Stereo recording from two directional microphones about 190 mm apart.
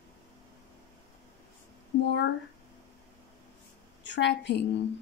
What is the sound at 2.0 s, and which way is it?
Speech, 65° left (ahead or behind).